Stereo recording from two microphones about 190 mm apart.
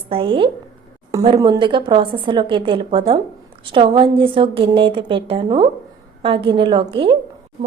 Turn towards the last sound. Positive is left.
turn(degrees=-25)  # may be behind; listen again after turning